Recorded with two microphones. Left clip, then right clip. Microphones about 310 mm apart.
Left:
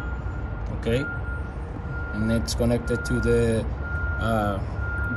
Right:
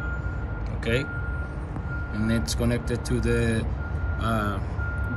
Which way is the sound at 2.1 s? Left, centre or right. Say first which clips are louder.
Left 2 dB; centre.